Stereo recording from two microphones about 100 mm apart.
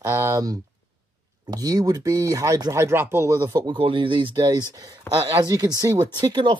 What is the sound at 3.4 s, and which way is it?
Speech, 45° right (ahead or behind).